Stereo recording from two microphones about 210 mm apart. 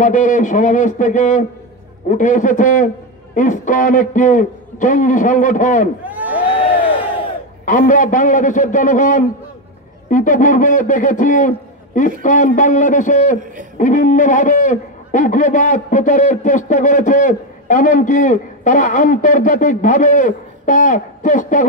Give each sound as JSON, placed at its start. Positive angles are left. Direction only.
{"t": 0.0, "sound": "a man's voice", "side_deg": 40}
{"t": 6.0, "sound": "a sound", "side_deg": -5}
{"t": 7.6, "sound": "a man's voice", "side_deg": 40}